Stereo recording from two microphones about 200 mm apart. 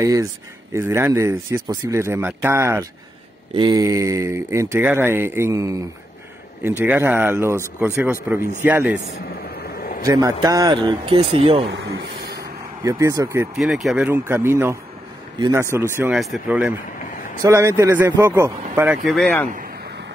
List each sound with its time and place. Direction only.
0.0 s speech: 15° right (ahead or behind)
9.3 s vehicle: 50° left (ahead or behind)
10.0 s speech: 15° right (ahead or behind)
11.7 s speech: 65° right (ahead or behind)
12.4 s vehicle: 15° right (ahead or behind)
13.6 s speech: centre (ahead or behind)
19.0 s a man's voice: 5° left (ahead or behind)